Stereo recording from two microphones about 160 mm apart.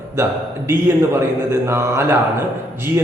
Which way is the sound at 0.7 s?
15° right (ahead or behind).